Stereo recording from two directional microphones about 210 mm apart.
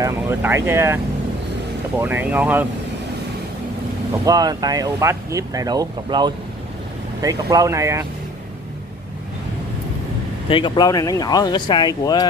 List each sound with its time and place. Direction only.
0.0 s speech: 10° right (ahead or behind)
4.1 s speech: 15° right (ahead or behind)
10.5 s speech: 20° left (ahead or behind)